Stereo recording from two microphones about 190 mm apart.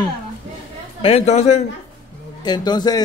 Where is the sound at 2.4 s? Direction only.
20° left (ahead or behind).